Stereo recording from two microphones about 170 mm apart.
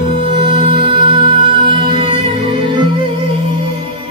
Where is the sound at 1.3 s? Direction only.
50° left (ahead or behind).